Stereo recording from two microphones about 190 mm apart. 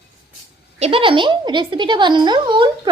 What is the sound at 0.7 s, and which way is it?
Speech, 30° right (ahead or behind).